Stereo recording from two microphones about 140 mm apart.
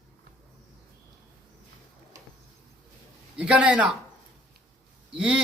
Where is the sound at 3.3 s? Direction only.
10° right (ahead or behind).